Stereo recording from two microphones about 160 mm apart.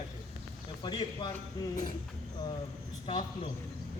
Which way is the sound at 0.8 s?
30° left (ahead or behind).